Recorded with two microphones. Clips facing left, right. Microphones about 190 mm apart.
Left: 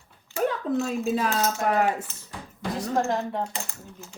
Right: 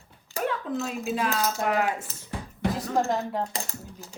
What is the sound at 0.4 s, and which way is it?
Speech, 40° left (ahead or behind).